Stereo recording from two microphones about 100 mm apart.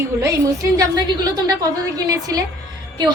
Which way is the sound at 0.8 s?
45° right (ahead or behind).